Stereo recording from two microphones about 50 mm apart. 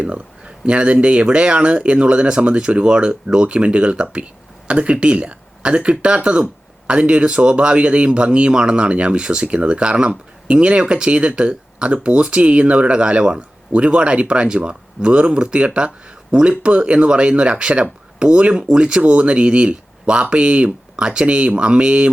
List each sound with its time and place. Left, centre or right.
0.0 s speech: right